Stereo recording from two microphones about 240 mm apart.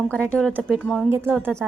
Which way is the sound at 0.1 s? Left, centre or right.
Centre.